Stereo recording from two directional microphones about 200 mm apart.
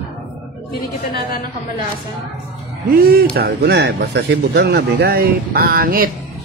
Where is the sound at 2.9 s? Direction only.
50° right (ahead or behind).